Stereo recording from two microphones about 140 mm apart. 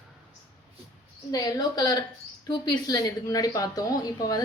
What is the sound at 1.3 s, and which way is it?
A woman's voice, 25° left (ahead or behind).